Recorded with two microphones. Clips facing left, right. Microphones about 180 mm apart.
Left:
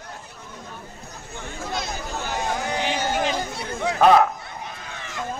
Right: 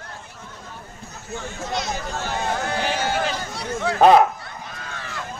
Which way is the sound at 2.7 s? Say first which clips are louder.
Right 1 dB; 15° left (ahead or behind).